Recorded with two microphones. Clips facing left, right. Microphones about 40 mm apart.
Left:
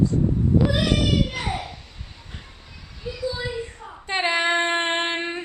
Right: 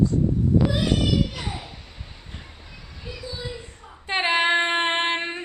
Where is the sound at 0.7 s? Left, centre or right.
Left.